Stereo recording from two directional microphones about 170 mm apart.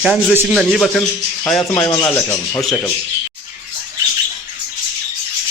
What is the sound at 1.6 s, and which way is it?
Speech, 20° left (ahead or behind).